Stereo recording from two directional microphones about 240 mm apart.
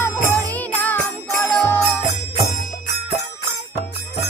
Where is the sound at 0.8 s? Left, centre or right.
Centre.